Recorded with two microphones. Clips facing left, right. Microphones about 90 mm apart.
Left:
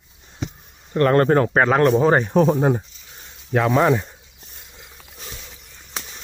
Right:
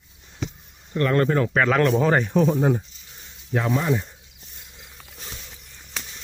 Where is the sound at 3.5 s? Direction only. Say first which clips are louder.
Left 6 dB; 75° left (ahead or behind).